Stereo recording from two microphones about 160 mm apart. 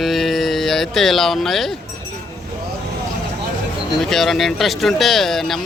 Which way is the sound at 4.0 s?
Centre (ahead or behind).